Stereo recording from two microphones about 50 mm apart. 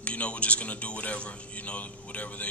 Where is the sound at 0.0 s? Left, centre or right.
Left.